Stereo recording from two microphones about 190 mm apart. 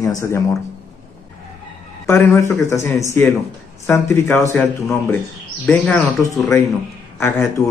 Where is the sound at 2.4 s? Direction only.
15° left (ahead or behind).